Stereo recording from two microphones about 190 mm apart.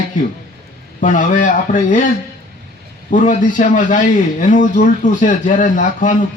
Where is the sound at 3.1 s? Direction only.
45° left (ahead or behind).